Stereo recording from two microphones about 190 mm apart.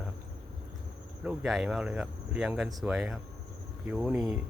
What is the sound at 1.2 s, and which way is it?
Speech, 5° right (ahead or behind).